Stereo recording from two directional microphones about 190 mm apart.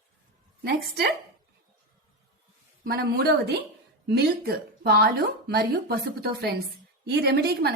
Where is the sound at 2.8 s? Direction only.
55° right (ahead or behind).